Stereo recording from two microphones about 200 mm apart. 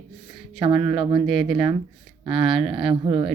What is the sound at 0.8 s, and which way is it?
Speech, 25° right (ahead or behind).